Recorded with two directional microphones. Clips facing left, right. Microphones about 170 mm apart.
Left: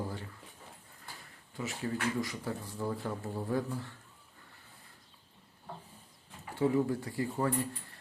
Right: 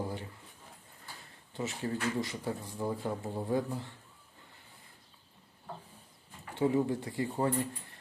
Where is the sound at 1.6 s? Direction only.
25° right (ahead or behind).